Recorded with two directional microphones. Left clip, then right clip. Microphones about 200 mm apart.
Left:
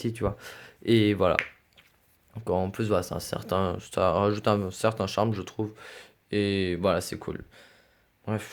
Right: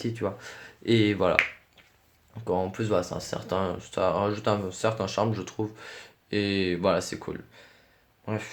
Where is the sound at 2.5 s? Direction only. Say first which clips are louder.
Even; 40° left (ahead or behind).